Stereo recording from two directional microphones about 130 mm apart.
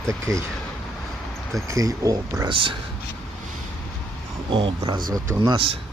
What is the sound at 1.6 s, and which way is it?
Speech, 25° right (ahead or behind).